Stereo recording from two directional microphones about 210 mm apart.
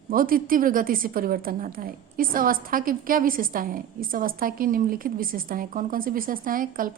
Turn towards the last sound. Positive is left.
turn(degrees=-40)  # may be behind; listen again after turning